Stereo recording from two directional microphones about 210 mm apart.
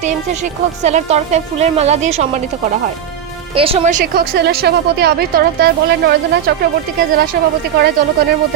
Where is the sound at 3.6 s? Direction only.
25° right (ahead or behind); by 6.6 s 50° right (ahead or behind).